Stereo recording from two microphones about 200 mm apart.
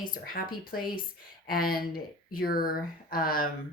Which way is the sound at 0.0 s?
45° left (ahead or behind).